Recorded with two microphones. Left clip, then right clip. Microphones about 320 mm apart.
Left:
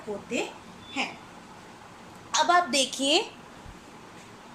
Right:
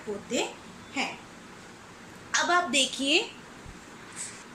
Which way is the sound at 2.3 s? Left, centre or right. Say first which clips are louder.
Left 2 dB; centre.